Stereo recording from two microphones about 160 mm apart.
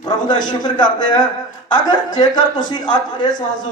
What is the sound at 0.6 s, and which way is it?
A man's voice, 25° left (ahead or behind).